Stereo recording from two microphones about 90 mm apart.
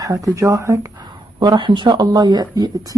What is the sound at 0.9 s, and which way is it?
A woman's voice, 50° right (ahead or behind).